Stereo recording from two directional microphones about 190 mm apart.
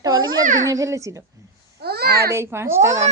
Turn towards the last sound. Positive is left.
turn(degrees=-15)  # may be behind; listen again after turning